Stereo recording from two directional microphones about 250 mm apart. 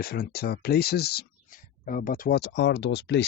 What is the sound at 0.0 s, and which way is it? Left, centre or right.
Speech, left.